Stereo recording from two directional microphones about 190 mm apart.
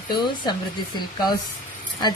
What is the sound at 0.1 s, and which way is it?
Speech, 25° left (ahead or behind).